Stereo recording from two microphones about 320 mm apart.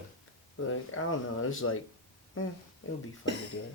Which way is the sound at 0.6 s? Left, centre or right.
Left.